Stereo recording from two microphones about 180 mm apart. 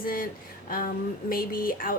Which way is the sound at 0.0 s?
55° left (ahead or behind).